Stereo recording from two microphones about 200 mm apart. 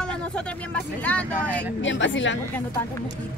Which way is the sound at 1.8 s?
65° left (ahead or behind).